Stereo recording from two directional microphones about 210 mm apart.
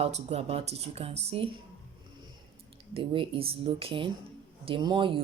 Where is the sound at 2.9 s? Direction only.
25° right (ahead or behind).